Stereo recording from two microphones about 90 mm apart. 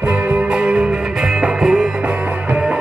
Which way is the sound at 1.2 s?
5° right (ahead or behind).